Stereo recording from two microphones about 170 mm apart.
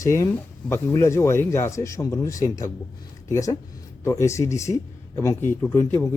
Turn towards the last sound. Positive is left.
turn(degrees=15)  # may be behind; listen again after turning